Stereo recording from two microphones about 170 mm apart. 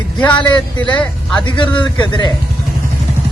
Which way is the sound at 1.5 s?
30° left (ahead or behind).